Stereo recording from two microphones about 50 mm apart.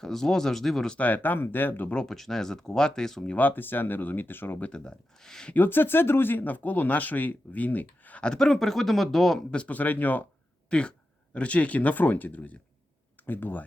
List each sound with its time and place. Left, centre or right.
0.0 s speech: centre
0.9 s speech: left
2.0 s speech: centre
3.3 s speech: left
4.6 s speech: centre
5.5 s speech: left
8.2 s speech: centre
9.5 s speech: left
10.7 s speech: left